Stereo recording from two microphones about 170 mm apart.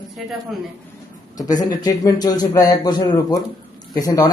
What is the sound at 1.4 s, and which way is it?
Speech, 20° left (ahead or behind).